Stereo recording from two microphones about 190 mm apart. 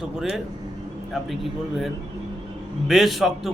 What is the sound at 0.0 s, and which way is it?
A man's voice, centre (ahead or behind).